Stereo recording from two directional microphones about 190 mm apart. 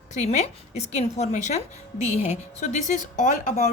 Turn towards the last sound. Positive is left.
turn(degrees=40)  # may be behind; listen again after turning